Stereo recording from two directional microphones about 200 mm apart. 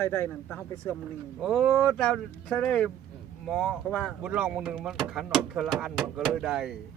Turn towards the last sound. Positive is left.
turn(degrees=0)  # may be behind; listen again after turning